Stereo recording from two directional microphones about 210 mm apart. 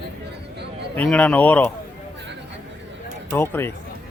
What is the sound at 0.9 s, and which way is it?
Speech, 5° left (ahead or behind).